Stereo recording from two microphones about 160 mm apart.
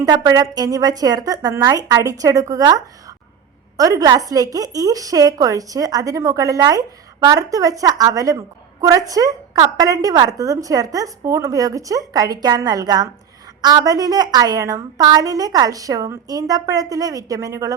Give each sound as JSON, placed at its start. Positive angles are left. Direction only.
{"t": 0.0, "sound": "a woman's voice", "side_deg": -25}